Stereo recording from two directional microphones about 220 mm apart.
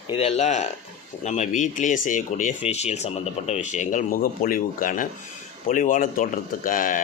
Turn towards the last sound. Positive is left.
turn(degrees=40)  # may be behind; listen again after turning